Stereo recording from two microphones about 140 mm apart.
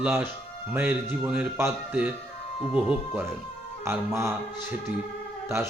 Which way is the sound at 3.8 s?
20° right (ahead or behind).